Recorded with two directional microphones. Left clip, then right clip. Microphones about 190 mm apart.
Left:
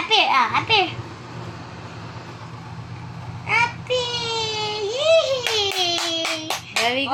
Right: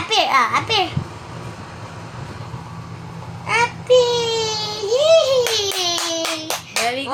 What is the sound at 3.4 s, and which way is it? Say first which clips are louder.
Child singing: right 4 dB; 20° right (ahead or behind).